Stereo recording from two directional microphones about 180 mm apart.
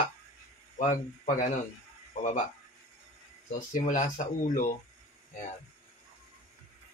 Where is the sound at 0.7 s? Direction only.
45° left (ahead or behind).